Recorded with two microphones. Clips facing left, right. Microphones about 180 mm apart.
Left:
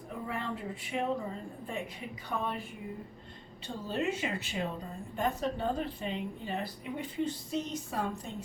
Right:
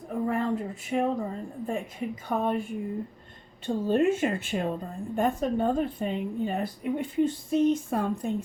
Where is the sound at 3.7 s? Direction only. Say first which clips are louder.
Right 10 dB; 50° right (ahead or behind).